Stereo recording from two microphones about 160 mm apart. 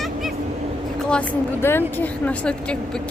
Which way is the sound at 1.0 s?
10° left (ahead or behind).